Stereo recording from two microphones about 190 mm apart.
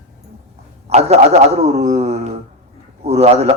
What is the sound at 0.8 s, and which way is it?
A man's voice, 35° right (ahead or behind).